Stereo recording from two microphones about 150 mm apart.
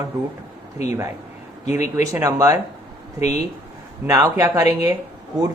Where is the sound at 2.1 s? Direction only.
20° right (ahead or behind).